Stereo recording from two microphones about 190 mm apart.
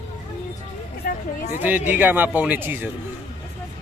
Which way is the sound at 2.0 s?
10° right (ahead or behind).